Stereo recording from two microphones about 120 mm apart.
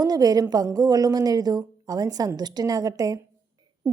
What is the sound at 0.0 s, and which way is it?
A woman's voice, 30° right (ahead or behind).